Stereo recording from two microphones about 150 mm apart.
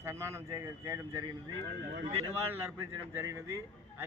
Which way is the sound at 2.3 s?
15° right (ahead or behind).